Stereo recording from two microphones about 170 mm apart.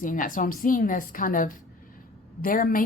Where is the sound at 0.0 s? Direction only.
50° left (ahead or behind).